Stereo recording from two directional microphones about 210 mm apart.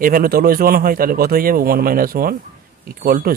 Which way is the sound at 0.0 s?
45° right (ahead or behind).